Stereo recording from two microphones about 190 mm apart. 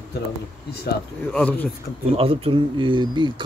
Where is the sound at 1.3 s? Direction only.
5° left (ahead or behind).